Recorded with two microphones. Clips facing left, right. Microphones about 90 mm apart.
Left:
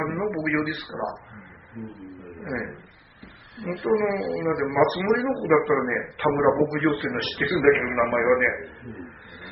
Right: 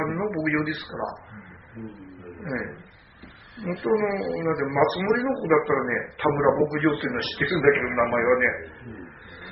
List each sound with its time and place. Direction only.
0.0 s a sound: centre (ahead or behind)
2.4 s speech: 10° right (ahead or behind)
3.6 s a man's voice: centre (ahead or behind)